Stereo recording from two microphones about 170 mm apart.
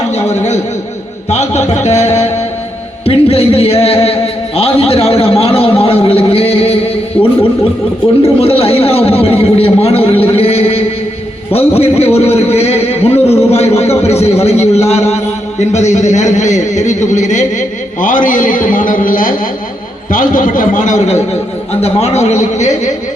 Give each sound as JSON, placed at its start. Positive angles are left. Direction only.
{"t": 0.1, "sound": "a man's voice", "side_deg": 40}
{"t": 3.1, "sound": "a sound", "side_deg": 35}
{"t": 8.2, "sound": "a man's voice", "side_deg": 35}
{"t": 21.8, "sound": "a man's voice", "side_deg": 40}